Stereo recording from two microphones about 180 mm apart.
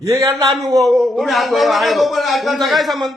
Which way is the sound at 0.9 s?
Centre (ahead or behind).